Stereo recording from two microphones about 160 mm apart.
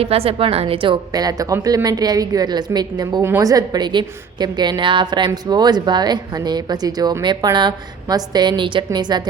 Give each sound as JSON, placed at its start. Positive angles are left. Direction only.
{"t": 0.0, "sound": "a woman's voice", "side_deg": -35}